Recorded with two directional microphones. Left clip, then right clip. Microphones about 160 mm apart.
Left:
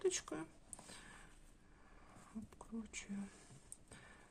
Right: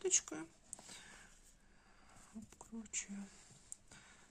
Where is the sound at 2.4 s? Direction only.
25° right (ahead or behind).